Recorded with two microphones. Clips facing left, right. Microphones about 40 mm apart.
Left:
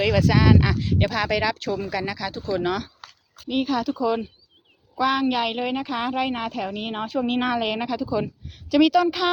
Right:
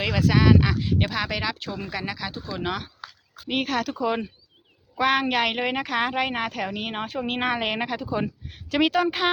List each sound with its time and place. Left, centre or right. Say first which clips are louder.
0.0 s speech: left 2 dB; centre
3.5 s a woman's voice: left 2 dB; right
6.7 s speech: left 3 dB; right